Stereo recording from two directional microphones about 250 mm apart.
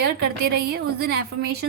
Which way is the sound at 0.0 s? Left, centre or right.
Right.